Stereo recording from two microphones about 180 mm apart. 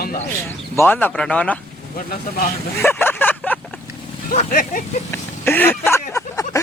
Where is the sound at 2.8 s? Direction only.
10° left (ahead or behind).